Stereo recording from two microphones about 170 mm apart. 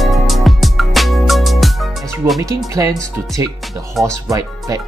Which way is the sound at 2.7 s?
20° right (ahead or behind).